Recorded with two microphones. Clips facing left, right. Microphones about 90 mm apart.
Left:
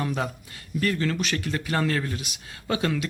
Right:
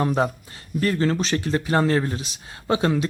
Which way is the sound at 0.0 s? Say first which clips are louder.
Right 7 dB; 35° right (ahead or behind).